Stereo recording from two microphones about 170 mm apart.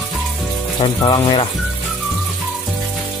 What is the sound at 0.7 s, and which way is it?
Speech, 30° left (ahead or behind).